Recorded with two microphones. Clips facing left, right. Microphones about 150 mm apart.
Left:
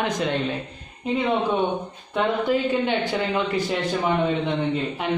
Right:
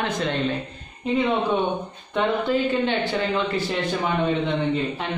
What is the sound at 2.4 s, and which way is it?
Mantra, 15° left (ahead or behind).